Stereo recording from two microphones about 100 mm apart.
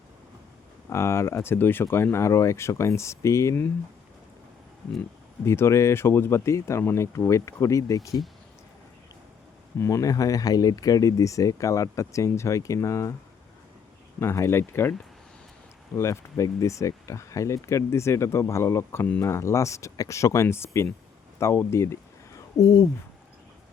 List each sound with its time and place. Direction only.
0.9 s speech: 25° left (ahead or behind)
5.5 s speech: 25° left (ahead or behind)
9.7 s speech: 30° left (ahead or behind)
14.2 s speech: 25° left (ahead or behind)
16.0 s speech: 30° left (ahead or behind)